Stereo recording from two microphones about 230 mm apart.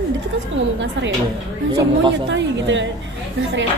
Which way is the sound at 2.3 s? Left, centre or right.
Right.